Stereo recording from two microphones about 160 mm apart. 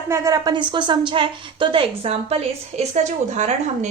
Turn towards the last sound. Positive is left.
turn(degrees=-45)  # may be behind; listen again after turning